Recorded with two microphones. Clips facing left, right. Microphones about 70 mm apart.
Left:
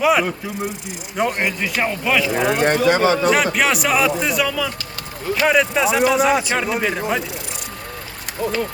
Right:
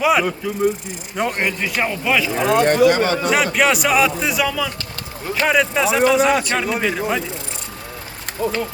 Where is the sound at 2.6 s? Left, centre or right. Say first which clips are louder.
Right 1 dB; left.